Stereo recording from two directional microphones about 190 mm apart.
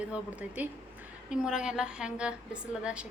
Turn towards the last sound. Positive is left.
turn(degrees=-5)  # may be behind; listen again after turning